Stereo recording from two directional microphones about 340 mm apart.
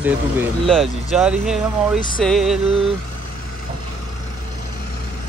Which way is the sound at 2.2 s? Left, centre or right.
Centre.